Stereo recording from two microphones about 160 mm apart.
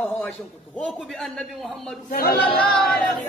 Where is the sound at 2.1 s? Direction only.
70° left (ahead or behind).